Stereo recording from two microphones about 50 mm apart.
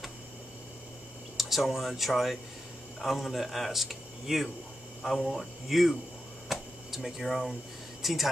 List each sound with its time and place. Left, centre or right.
1.3 s speech: centre
6.5 s a sound: centre
7.2 s speech: centre